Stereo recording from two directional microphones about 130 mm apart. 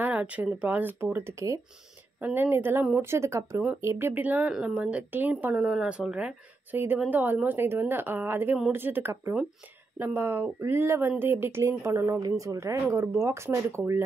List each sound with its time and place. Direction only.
0.0 s a woman's voice: 10° right (ahead or behind)